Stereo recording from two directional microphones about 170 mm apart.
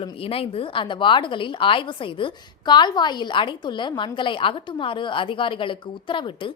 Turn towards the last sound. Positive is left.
turn(degrees=30)  # may be behind; listen again after turning